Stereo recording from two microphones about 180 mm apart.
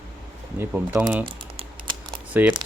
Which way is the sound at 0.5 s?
5° right (ahead or behind).